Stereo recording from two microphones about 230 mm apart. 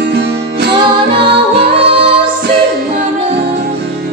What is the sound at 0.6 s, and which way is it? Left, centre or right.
Music, right.